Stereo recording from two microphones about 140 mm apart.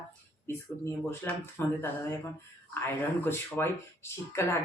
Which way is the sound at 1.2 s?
15° left (ahead or behind).